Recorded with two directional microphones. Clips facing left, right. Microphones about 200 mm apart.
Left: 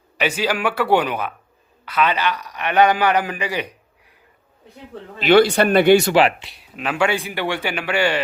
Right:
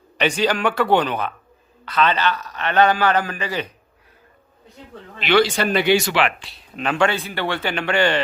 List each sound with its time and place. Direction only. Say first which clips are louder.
0.2 s a man's voice: right 2 dB; 5° left (ahead or behind)
5.2 s speech: left 4 dB; 50° left (ahead or behind)
6.4 s a man's voice: right 2 dB; 15° left (ahead or behind)